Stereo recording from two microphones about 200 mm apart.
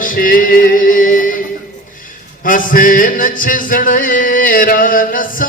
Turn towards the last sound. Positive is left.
turn(degrees=45)  # may be behind; listen again after turning